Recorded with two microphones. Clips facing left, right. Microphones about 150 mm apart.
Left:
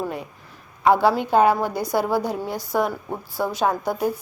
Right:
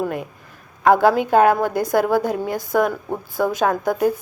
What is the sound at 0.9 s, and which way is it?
A woman's voice, 50° right (ahead or behind).